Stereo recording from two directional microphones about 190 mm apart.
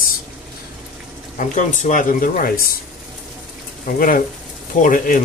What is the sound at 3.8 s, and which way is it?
Speech, 45° left (ahead or behind).